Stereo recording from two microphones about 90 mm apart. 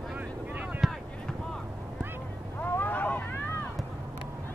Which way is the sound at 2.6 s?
20° left (ahead or behind).